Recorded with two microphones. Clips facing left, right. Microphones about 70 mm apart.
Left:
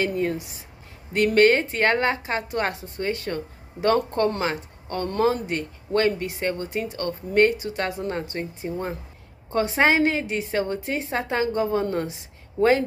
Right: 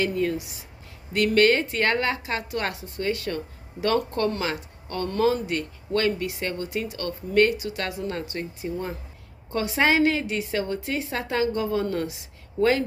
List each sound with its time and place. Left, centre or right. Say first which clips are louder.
0.0 s speech: even; left